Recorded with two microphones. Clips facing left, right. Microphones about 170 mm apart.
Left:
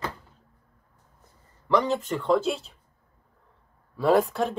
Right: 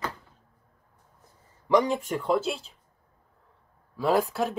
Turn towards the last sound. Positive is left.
turn(degrees=0)  # may be behind; listen again after turning